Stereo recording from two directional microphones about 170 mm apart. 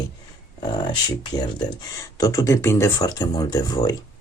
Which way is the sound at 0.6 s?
25° left (ahead or behind).